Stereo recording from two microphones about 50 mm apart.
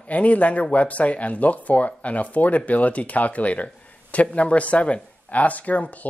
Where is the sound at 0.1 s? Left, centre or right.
Left.